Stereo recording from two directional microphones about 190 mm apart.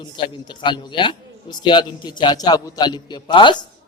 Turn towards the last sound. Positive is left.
turn(degrees=25)  # may be behind; listen again after turning